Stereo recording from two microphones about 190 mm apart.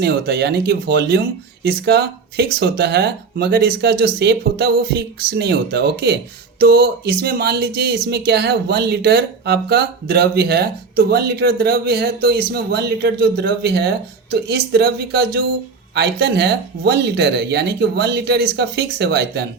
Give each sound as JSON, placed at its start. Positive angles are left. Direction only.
{"t": 0.0, "sound": "speech", "side_deg": -55}